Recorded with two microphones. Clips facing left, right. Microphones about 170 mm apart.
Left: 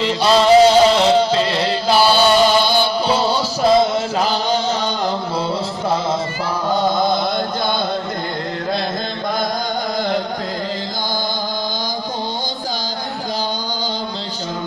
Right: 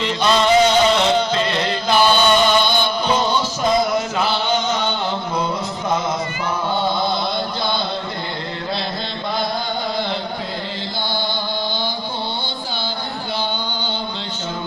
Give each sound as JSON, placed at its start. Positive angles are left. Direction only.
{"t": 0.0, "sound": "music", "side_deg": 35}
{"t": 4.2, "sound": "music", "side_deg": 35}
{"t": 6.7, "sound": "chant", "side_deg": 45}